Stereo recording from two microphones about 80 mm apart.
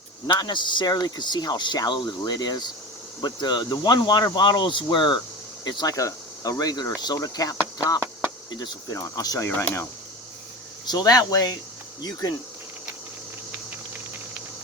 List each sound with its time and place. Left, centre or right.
0.3 s speech: left
5.6 s speech: left
5.9 s speech: left
8.4 s speech: left
8.9 s speech: left
10.8 s speech: left